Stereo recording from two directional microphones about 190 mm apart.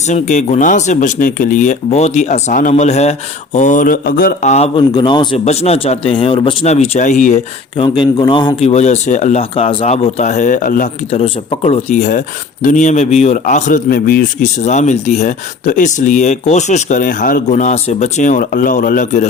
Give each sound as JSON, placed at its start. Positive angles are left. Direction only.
{"t": 0.1, "sound": "a man's voice", "side_deg": 40}
{"t": 4.5, "sound": "a man's voice", "side_deg": 30}
{"t": 7.8, "sound": "a man's voice", "side_deg": 25}